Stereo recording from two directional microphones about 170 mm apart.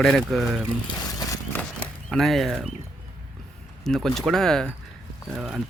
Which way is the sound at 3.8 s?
5° left (ahead or behind).